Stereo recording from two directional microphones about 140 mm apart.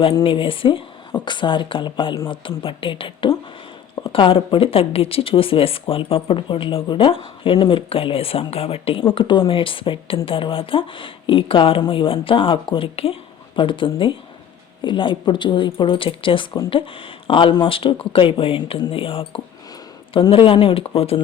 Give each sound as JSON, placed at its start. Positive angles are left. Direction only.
{"t": 0.0, "sound": "speech", "side_deg": 35}